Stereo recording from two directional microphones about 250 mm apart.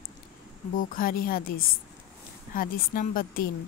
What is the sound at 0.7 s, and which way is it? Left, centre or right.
Speech, left.